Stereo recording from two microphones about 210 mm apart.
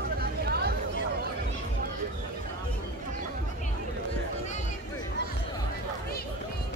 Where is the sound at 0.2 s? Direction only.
50° right (ahead or behind).